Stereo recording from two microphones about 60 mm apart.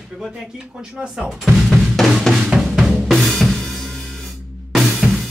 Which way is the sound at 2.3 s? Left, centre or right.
Centre.